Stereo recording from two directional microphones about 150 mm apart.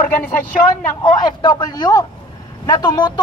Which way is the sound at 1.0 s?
30° left (ahead or behind).